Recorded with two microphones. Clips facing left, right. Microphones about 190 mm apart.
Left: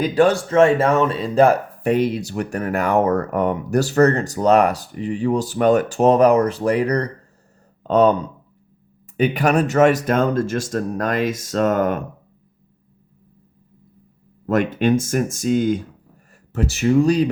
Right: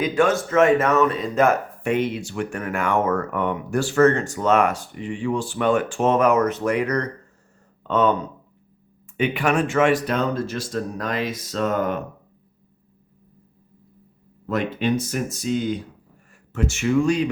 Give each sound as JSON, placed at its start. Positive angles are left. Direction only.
{"t": 0.0, "sound": "speech", "side_deg": 35}
{"t": 9.1, "sound": "speech", "side_deg": 40}
{"t": 14.4, "sound": "speech", "side_deg": 50}
{"t": 16.5, "sound": "speech", "side_deg": 35}